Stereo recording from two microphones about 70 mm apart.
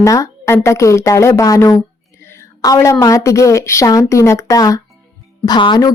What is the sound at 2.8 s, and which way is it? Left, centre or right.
A woman's voice, left.